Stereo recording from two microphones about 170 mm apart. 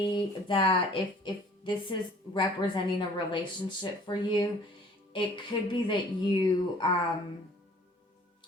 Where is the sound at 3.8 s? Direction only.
25° left (ahead or behind).